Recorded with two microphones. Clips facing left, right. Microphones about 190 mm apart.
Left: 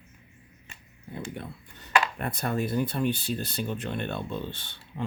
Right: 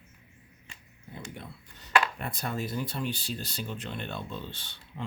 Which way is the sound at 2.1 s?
55° left (ahead or behind).